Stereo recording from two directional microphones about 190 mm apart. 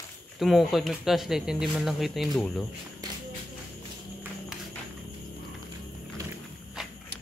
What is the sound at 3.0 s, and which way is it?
Music, 20° right (ahead or behind).